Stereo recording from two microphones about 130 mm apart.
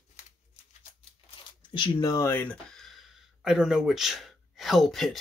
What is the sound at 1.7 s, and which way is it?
Speech, 35° left (ahead or behind).